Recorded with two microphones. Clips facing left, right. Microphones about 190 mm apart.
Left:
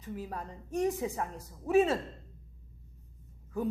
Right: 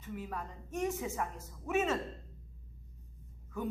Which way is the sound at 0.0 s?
35° left (ahead or behind).